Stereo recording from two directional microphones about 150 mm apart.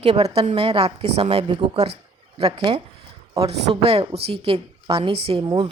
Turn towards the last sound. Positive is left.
turn(degrees=-25)  # may be behind; listen again after turning